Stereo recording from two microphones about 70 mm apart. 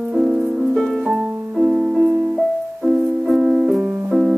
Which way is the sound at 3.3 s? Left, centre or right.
Centre.